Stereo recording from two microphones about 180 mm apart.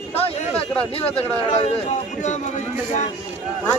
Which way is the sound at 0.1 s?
35° left (ahead or behind).